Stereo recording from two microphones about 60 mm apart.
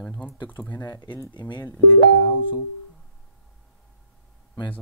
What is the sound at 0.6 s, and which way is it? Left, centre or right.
Speech, left.